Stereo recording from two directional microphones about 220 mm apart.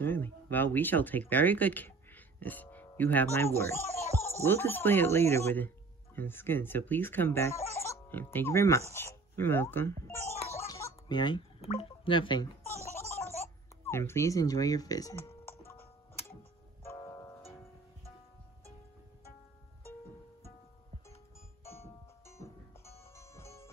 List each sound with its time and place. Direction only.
0.0 s speech: 10° left (ahead or behind)
10.5 s a sound: 10° left (ahead or behind)
13.8 s speech: 10° left (ahead or behind)
15.6 s music: 10° left (ahead or behind)
22.2 s music: 10° left (ahead or behind)